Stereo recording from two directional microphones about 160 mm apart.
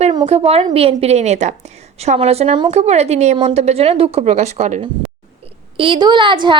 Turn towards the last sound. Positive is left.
turn(degrees=-30)  # may be behind; listen again after turning